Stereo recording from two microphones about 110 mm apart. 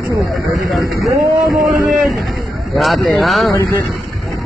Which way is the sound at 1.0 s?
30° right (ahead or behind).